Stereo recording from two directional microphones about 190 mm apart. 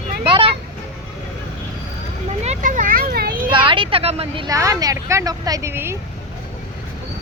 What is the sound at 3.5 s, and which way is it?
Speech, 25° right (ahead or behind).